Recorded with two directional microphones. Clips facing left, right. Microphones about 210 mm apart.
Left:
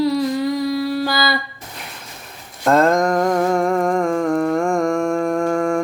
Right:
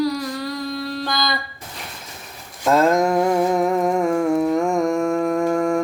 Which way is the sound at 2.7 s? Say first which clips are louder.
Left 1 dB; centre (ahead or behind).